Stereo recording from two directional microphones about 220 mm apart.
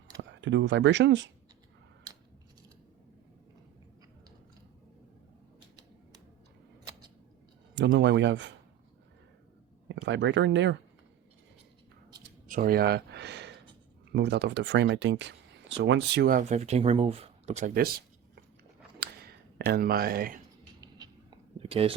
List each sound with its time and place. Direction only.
0.2 s speech: 55° right (ahead or behind)
7.8 s speech: 55° right (ahead or behind)
9.9 s speech: 55° right (ahead or behind)
12.5 s speech: 40° right (ahead or behind)
18.9 s a sound: 45° right (ahead or behind)
20.8 s a sound: 20° right (ahead or behind)